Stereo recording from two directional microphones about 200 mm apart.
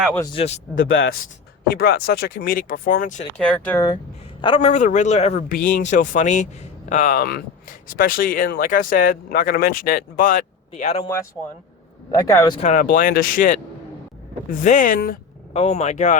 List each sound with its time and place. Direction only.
0.8 s speech: 70° left (ahead or behind)
1.6 s speech: 50° left (ahead or behind)
3.3 s speech: 5° left (ahead or behind)
3.8 s a man's voice: 25° left (ahead or behind); by 10.4 s 45° left (ahead or behind)
10.7 s speech: 30° left (ahead or behind)
12.1 s speech: 15° left (ahead or behind)
12.5 s a man's voice: 40° left (ahead or behind)
15.5 s a man's voice: 30° left (ahead or behind)